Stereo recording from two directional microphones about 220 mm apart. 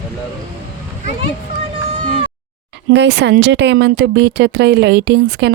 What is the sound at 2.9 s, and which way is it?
Speech, 55° right (ahead or behind).